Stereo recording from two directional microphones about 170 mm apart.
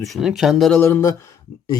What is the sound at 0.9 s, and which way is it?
Speech, 15° left (ahead or behind).